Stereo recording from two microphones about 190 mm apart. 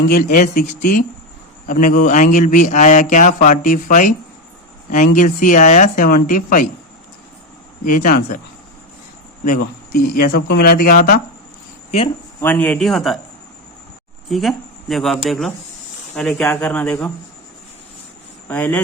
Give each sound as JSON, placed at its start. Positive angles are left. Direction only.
{"t": 0.1, "sound": "a man's voice", "side_deg": 50}
{"t": 7.9, "sound": "a man's voice", "side_deg": 45}
{"t": 9.4, "sound": "a man's voice", "side_deg": 50}
{"t": 12.4, "sound": "speech", "side_deg": 10}
{"t": 14.3, "sound": "speech", "side_deg": 0}
{"t": 18.4, "sound": "speech", "side_deg": 10}